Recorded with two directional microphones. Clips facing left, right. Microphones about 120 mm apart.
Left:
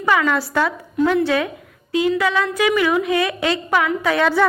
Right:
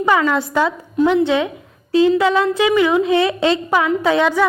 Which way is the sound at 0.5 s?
20° right (ahead or behind).